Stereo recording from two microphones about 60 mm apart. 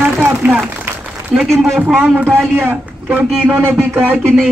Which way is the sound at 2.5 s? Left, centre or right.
Right.